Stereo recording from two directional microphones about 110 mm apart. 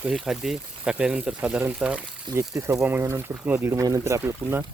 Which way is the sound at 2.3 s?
25° right (ahead or behind).